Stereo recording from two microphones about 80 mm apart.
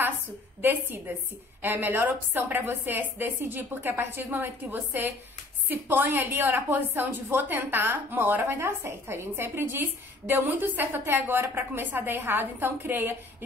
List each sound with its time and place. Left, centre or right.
0.6 s a woman's voice: right